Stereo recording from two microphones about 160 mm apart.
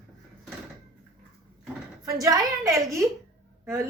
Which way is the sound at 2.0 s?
20° right (ahead or behind).